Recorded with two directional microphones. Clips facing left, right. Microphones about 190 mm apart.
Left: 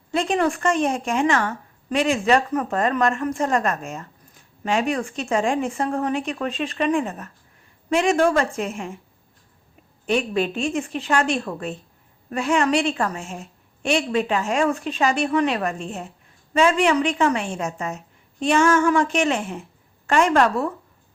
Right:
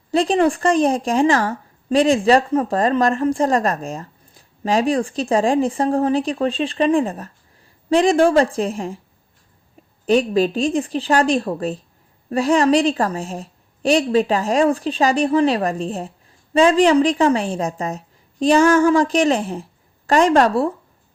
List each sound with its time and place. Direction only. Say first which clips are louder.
0.1 s a woman's voice: right 5 dB; 35° right (ahead or behind)
10.1 s a woman's voice: right 6 dB; 35° right (ahead or behind)